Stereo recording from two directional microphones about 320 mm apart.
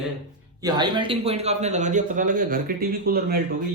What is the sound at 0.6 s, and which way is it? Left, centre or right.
A man's voice, centre.